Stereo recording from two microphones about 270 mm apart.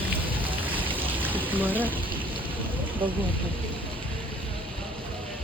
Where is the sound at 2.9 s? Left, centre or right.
Centre.